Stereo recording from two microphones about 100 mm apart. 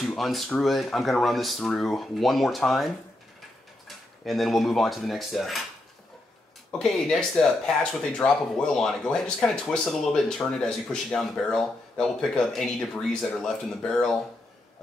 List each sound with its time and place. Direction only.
0.0 s a sound: centre (ahead or behind)
0.5 s speech: centre (ahead or behind)
4.2 s speech: centre (ahead or behind)
6.7 s speech: 5° left (ahead or behind)